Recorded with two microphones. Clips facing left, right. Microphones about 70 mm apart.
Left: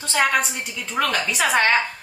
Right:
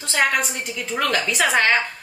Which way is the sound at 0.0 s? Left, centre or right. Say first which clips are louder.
Even; centre.